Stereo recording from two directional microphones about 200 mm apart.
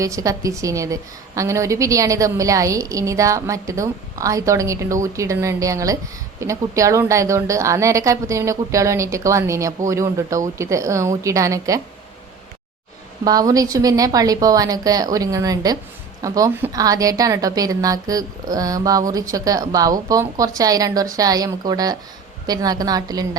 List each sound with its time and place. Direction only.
0.0 s a woman's voice: 15° right (ahead or behind)
13.2 s a woman's voice: 20° right (ahead or behind)